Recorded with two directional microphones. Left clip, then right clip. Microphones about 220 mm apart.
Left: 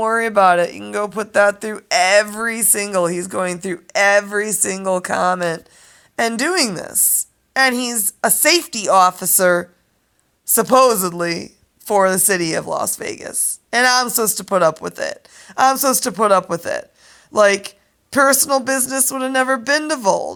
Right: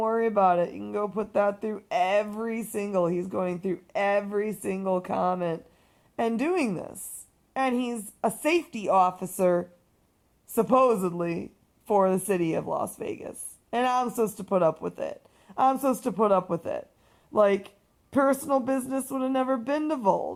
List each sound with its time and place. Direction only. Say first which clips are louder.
0.0 s a woman's voice: left 9 dB; 15° left (ahead or behind)
10.5 s a woman's voice: left 9 dB; 20° left (ahead or behind)